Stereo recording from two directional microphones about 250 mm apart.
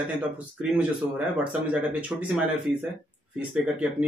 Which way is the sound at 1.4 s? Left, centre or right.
Centre.